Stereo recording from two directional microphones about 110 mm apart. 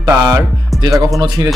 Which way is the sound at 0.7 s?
35° right (ahead or behind).